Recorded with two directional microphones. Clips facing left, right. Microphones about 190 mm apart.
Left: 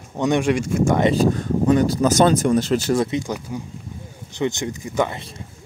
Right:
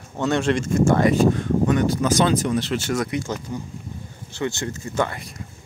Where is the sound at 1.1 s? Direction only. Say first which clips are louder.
Even; 35° left (ahead or behind).